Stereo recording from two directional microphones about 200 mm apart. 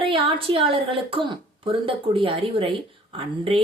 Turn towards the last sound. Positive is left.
turn(degrees=-25)  # may be behind; listen again after turning